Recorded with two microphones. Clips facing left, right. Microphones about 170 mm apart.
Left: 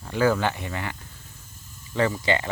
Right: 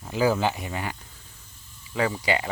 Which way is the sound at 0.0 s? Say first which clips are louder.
Left 1 dB; 10° right (ahead or behind).